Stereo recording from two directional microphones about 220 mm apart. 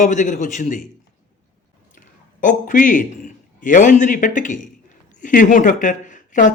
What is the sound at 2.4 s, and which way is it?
Speech, 35° left (ahead or behind).